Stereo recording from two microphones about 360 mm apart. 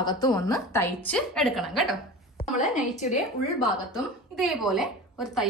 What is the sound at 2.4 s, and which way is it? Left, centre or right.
Speech, left.